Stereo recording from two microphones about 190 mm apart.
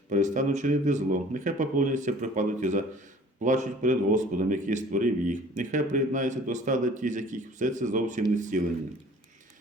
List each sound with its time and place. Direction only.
0.1 s a man's voice: 40° right (ahead or behind)